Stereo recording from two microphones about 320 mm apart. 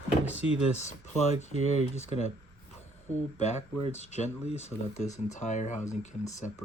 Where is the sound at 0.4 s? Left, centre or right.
Left.